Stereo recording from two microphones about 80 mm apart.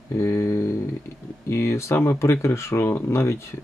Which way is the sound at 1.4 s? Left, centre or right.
Left.